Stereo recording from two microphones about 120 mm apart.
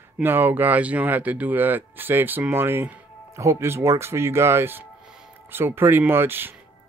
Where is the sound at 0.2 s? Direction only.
15° right (ahead or behind).